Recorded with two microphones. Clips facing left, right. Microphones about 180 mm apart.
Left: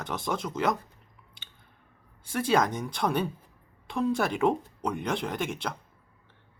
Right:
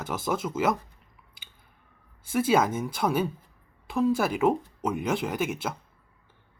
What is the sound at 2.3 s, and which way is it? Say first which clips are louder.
Speech: right 2 dB; 5° right (ahead or behind).